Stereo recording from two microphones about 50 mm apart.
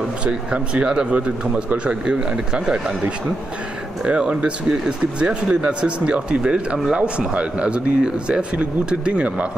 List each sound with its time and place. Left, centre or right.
0.2 s speech: right